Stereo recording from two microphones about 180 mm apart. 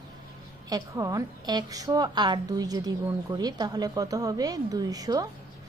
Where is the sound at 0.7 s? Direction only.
20° right (ahead or behind).